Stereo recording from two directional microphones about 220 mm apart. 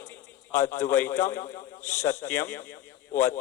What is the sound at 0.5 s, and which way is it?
A man's voice, 10° left (ahead or behind).